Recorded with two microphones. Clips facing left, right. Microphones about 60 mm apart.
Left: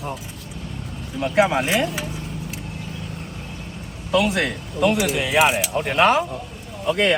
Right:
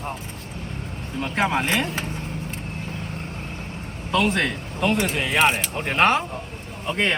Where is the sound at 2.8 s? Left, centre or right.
Right.